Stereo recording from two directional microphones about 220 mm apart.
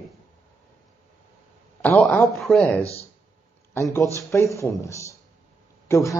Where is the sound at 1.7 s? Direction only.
5° left (ahead or behind).